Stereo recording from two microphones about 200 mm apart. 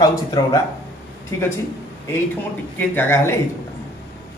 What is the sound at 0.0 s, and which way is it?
Speech, 20° left (ahead or behind).